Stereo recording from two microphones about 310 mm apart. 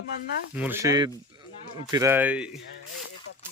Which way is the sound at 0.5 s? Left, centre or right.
Centre.